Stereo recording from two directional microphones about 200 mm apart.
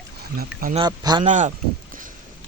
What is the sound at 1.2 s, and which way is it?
Speech, 40° right (ahead or behind).